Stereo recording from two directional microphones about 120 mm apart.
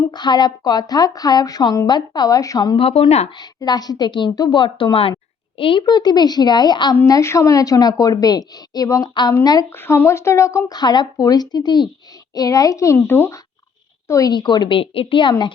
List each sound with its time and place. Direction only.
0.1 s a woman's voice: 35° left (ahead or behind)
2.7 s speech: 50° left (ahead or behind)
3.3 s a woman's voice: 35° left (ahead or behind)
7.0 s a woman's voice: 25° left (ahead or behind)
9.6 s speech: 20° left (ahead or behind)
14.1 s a woman's voice: 30° left (ahead or behind)